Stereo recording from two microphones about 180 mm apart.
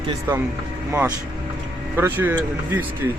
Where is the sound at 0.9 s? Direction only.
15° right (ahead or behind).